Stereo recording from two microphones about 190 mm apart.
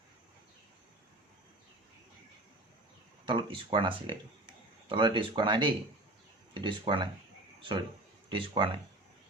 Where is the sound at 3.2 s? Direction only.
25° right (ahead or behind).